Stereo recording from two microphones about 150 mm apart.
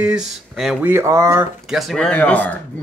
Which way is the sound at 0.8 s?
15° right (ahead or behind).